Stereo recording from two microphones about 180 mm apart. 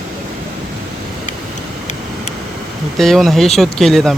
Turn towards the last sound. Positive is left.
turn(degrees=0)  # may be behind; listen again after turning